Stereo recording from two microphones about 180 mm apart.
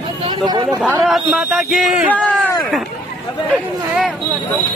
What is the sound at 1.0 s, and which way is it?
Speech, centre (ahead or behind).